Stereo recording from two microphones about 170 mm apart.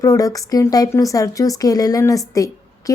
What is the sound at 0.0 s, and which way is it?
Speech, 20° left (ahead or behind).